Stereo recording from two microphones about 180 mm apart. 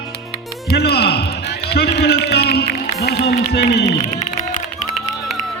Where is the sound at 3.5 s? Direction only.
65° left (ahead or behind).